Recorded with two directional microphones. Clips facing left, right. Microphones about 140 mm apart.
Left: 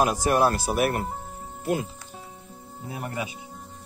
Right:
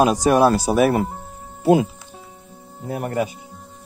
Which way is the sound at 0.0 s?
90° right.